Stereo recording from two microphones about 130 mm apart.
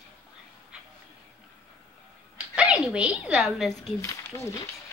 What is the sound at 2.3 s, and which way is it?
Speech, 10° right (ahead or behind).